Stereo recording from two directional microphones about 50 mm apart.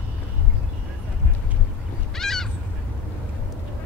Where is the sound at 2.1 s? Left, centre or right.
Centre.